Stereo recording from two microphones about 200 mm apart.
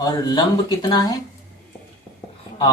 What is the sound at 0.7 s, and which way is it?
Speech, 20° left (ahead or behind).